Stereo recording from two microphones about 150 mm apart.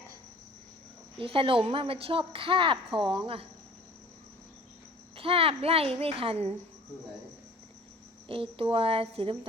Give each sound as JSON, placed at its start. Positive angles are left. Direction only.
{"t": 1.2, "sound": "a woman's voice", "side_deg": -35}
{"t": 5.1, "sound": "a woman's voice", "side_deg": -35}
{"t": 8.3, "sound": "a woman's voice", "side_deg": -35}